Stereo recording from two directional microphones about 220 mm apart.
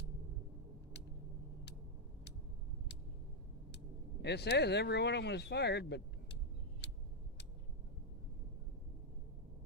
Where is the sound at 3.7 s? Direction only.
50° left (ahead or behind).